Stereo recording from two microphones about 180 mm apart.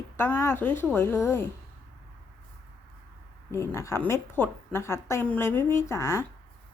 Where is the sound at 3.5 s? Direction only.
15° left (ahead or behind).